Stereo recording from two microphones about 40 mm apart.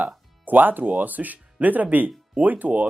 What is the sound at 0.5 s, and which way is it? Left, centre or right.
Speech, right.